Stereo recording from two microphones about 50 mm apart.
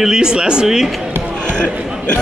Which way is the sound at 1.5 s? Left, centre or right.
Centre.